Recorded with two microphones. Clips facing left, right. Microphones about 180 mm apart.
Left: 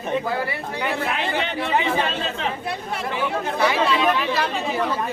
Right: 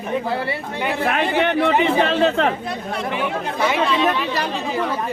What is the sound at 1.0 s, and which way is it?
A man's voice, 55° right (ahead or behind).